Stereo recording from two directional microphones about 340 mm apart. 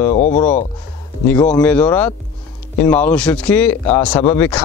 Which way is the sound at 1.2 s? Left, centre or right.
Centre.